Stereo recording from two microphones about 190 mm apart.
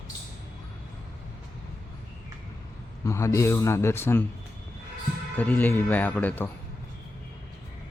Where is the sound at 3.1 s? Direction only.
15° left (ahead or behind).